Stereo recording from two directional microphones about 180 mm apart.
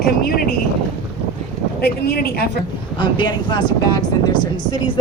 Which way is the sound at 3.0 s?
25° left (ahead or behind).